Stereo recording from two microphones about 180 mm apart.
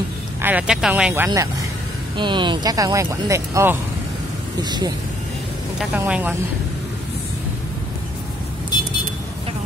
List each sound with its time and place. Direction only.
0.4 s speech: 10° right (ahead or behind)
2.1 s speech: 25° right (ahead or behind)
5.9 s speech: 10° right (ahead or behind)